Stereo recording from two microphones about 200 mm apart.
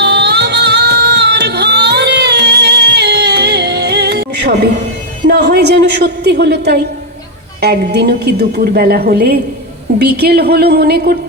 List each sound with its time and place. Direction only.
0.0 s music: 55° right (ahead or behind)
5.3 s a sound: 55° right (ahead or behind)
7.6 s a woman's voice: 55° right (ahead or behind)